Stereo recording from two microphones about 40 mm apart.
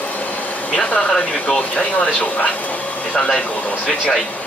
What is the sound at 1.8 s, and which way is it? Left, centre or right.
Speech, left.